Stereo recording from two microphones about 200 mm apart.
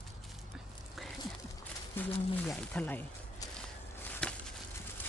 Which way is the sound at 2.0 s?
10° left (ahead or behind).